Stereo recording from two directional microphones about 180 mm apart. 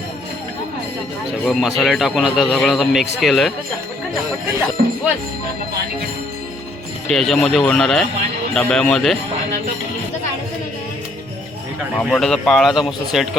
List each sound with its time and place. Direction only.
1.5 s a man's voice: centre (ahead or behind)
4.8 s speech: 50° right (ahead or behind)
7.1 s a man's voice: centre (ahead or behind)
12.1 s a man's voice: 5° left (ahead or behind)